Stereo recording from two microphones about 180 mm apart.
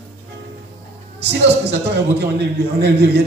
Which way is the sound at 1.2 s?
70° right (ahead or behind).